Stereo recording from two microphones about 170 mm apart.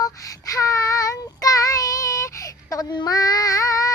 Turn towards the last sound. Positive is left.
turn(degrees=20)  # may be behind; listen again after turning